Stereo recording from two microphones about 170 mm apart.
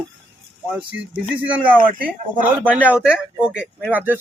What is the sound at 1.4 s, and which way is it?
Speech, 10° right (ahead or behind).